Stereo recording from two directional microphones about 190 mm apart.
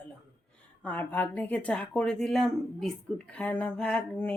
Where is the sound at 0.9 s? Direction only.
10° left (ahead or behind).